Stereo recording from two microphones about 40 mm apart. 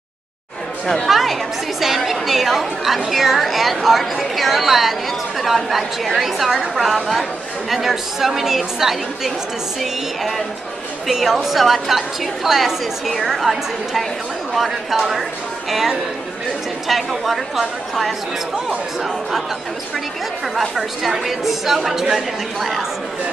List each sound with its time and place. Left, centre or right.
1.0 s a woman's voice: centre
21.3 s a woman's voice: centre